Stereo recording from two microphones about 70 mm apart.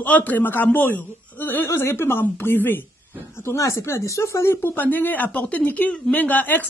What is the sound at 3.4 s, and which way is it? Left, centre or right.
Speech, left.